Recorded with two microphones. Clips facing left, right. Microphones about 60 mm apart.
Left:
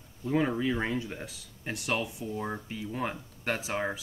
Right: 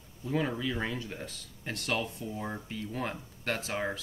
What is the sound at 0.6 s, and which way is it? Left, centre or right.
Speech, left.